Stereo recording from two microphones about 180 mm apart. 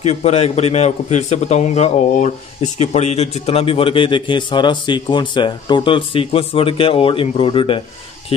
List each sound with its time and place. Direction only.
0.0 s a man's voice: 35° left (ahead or behind)